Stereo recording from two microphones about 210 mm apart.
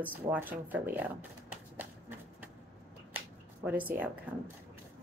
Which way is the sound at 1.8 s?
10° right (ahead or behind).